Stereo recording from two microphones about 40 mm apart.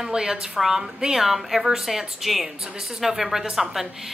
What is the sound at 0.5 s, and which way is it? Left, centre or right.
A woman's voice, centre.